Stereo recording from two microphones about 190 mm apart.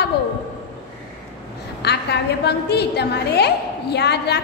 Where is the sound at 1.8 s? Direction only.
60° left (ahead or behind).